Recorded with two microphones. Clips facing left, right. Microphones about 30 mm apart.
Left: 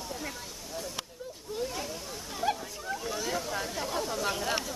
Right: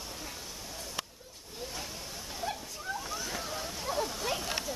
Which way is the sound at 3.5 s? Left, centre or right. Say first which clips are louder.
Left 3 dB; centre.